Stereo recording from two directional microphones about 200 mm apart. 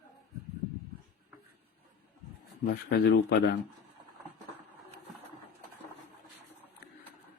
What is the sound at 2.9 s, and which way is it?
Speech, 55° left (ahead or behind).